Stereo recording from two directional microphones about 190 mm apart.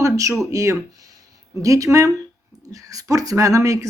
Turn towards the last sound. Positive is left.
turn(degrees=-15)  # may be behind; listen again after turning